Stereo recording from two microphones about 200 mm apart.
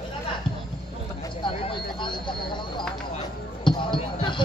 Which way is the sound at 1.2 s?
25° left (ahead or behind).